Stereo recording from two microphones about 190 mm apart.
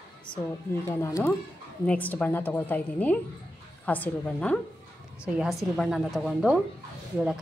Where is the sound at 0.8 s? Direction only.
15° left (ahead or behind).